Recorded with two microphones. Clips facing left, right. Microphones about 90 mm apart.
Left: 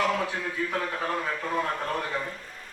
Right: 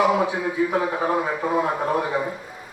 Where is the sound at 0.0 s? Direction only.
10° right (ahead or behind).